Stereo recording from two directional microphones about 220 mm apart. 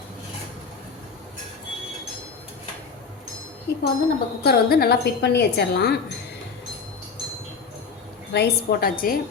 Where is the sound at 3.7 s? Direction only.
45° left (ahead or behind).